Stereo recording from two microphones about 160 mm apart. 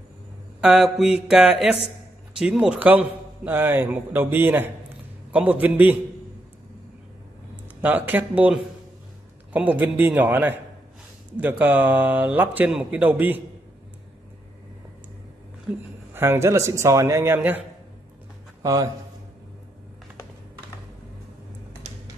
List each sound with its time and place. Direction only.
0.6 s a sound: 5° right (ahead or behind)
2.3 s a man's voice: 5° right (ahead or behind)
7.8 s a man's voice: 10° right (ahead or behind)
16.1 s a man's voice: 15° right (ahead or behind)
18.6 s speech: 20° right (ahead or behind)